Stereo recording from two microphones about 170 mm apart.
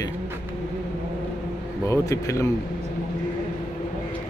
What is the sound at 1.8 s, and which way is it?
Speech, 20° left (ahead or behind).